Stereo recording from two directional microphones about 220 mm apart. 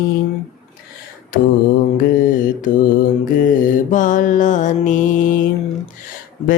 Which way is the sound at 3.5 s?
35° left (ahead or behind).